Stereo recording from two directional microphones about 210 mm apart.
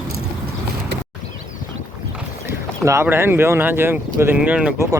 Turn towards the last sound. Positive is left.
turn(degrees=-10)  # may be behind; listen again after turning